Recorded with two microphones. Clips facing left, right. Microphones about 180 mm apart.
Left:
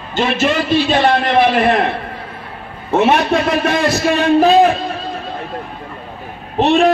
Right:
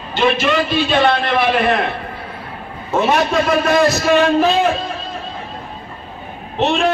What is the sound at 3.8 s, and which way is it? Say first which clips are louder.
Speech: right 1 dB; 35° left (ahead or behind).